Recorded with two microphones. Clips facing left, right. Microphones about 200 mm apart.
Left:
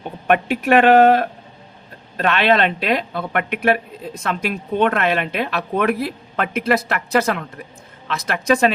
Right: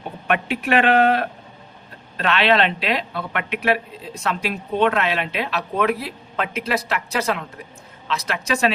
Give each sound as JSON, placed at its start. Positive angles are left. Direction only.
{"t": 0.3, "sound": "speech", "side_deg": 50}